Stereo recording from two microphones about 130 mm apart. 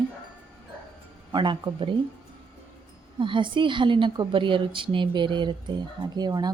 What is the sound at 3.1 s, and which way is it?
A woman's voice, 40° right (ahead or behind).